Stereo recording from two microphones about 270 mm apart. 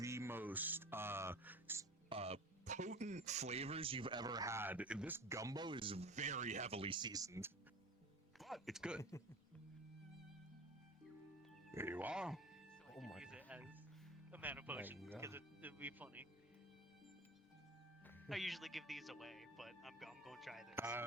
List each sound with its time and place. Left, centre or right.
0.0 s speech: centre
8.4 s speech: centre
9.0 s speech: centre
11.7 s speech: centre
12.9 s music: centre
14.3 s speech: centre
18.3 s speech: centre